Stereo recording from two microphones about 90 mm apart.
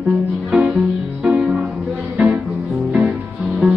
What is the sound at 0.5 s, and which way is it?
Music, 15° right (ahead or behind).